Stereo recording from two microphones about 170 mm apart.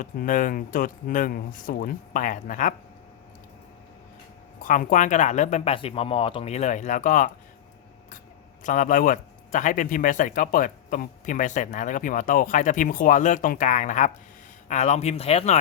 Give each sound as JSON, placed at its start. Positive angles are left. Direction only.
{"t": 0.0, "sound": "speech", "side_deg": 50}
{"t": 4.6, "sound": "speech", "side_deg": 50}
{"t": 8.6, "sound": "speech", "side_deg": 50}